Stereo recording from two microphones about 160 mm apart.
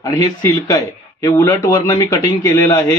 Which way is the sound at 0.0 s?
20° left (ahead or behind).